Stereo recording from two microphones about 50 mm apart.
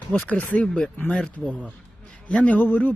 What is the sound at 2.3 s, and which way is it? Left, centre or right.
Speech, left.